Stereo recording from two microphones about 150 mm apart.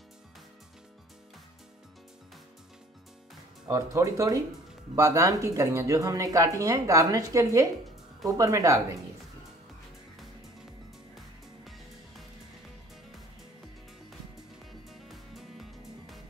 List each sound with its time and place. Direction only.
3.6 s speech: 20° right (ahead or behind)
14.7 s music: centre (ahead or behind)